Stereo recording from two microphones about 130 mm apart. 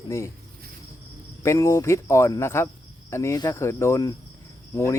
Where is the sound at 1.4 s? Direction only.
20° left (ahead or behind).